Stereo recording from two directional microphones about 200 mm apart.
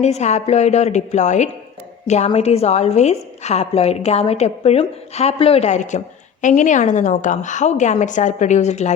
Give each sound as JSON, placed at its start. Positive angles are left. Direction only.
{"t": 0.0, "sound": "a woman's voice", "side_deg": 35}